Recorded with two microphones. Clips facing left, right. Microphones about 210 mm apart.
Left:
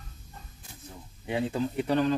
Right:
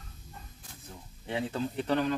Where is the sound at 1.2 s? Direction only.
10° left (ahead or behind).